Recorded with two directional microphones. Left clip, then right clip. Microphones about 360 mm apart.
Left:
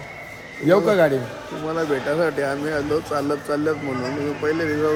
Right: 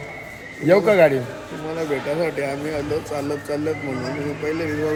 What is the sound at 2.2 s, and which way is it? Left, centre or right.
Speech, centre.